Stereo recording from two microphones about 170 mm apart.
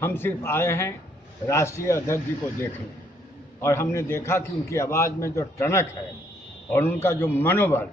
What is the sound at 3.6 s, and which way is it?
A man's voice, 15° left (ahead or behind).